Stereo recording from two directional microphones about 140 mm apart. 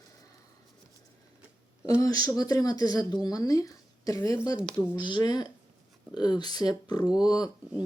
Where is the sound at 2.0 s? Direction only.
25° left (ahead or behind).